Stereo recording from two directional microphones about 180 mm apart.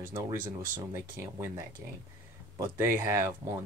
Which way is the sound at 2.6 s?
15° right (ahead or behind).